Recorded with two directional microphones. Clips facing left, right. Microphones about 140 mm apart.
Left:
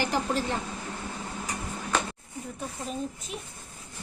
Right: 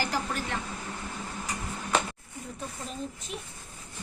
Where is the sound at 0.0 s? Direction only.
25° left (ahead or behind).